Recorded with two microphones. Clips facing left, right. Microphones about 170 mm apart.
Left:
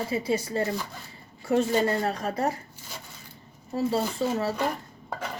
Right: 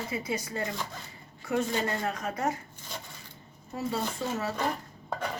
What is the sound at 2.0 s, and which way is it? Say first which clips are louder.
Speech: left 4 dB; 35° left (ahead or behind).